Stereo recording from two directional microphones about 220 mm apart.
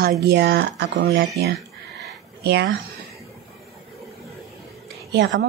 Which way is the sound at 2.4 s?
50° right (ahead or behind).